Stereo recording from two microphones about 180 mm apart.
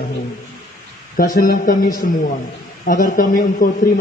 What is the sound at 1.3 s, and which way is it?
A man's voice, 50° left (ahead or behind).